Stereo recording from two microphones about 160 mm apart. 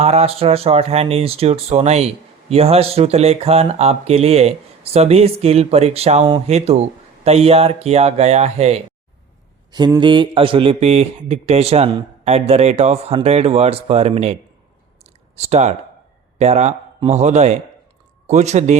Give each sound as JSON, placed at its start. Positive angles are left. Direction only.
{"t": 0.0, "sound": "speech", "side_deg": -40}
{"t": 10.0, "sound": "speech", "side_deg": -30}
{"t": 15.0, "sound": "a sound", "side_deg": -40}
{"t": 16.4, "sound": "speech", "side_deg": -45}